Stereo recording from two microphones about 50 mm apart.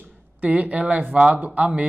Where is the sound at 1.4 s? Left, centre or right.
Right.